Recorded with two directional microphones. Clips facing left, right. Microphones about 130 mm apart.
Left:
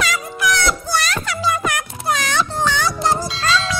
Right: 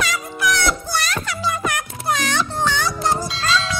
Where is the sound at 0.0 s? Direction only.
90° left.